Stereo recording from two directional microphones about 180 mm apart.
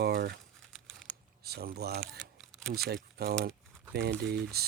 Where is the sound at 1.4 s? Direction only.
60° right (ahead or behind).